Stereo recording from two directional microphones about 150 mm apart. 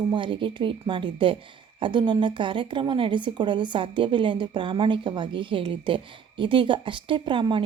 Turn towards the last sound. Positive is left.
turn(degrees=-35)  # may be behind; listen again after turning